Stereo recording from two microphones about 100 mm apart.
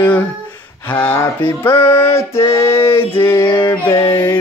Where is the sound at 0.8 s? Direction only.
15° left (ahead or behind).